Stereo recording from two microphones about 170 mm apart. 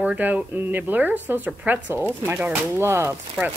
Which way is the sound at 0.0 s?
10° right (ahead or behind).